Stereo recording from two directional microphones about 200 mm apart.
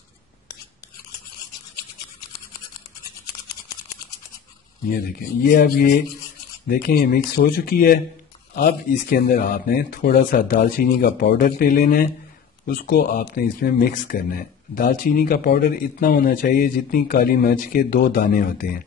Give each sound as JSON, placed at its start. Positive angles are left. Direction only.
{"t": 5.4, "sound": "speech", "side_deg": 45}